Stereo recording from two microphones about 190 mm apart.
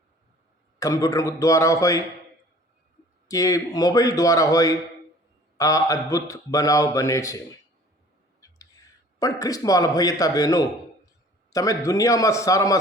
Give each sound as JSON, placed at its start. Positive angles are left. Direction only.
{"t": 0.8, "sound": "a man's voice", "side_deg": 15}
{"t": 3.2, "sound": "a man's voice", "side_deg": 15}
{"t": 8.4, "sound": "a sound", "side_deg": 15}
{"t": 11.5, "sound": "a man's voice", "side_deg": 15}